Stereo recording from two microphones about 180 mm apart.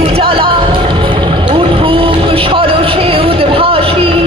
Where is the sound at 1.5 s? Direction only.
30° right (ahead or behind).